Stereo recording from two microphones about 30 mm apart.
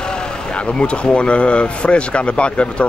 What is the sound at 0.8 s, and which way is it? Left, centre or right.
Speech, left.